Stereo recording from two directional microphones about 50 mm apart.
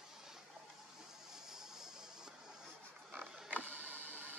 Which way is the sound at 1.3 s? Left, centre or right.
Centre.